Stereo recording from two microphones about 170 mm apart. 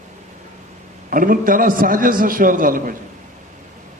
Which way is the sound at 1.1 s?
55° right (ahead or behind).